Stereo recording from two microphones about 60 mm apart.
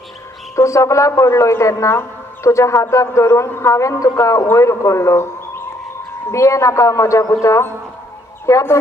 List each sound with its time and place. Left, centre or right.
0.6 s a man's voice: left
6.3 s a man's voice: left
8.5 s a man's voice: left